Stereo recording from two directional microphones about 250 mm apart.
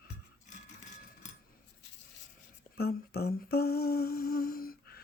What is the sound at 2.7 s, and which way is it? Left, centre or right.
Humming, left.